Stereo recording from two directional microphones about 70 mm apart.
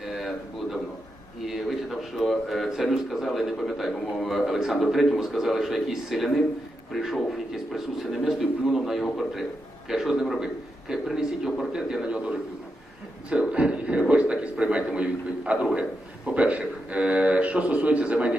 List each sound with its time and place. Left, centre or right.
0.0 s a sound: centre
1.5 s a man's voice: centre
13.3 s a man's voice: centre